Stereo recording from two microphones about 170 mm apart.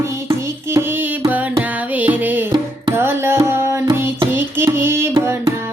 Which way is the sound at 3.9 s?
15° right (ahead or behind).